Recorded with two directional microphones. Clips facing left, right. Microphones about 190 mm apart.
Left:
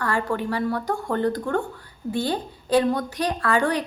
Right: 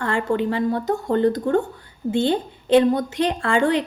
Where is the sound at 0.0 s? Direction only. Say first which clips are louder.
Right 3 dB; 25° right (ahead or behind).